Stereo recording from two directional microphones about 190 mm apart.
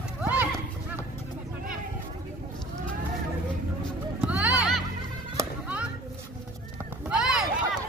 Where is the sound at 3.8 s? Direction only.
5° right (ahead or behind).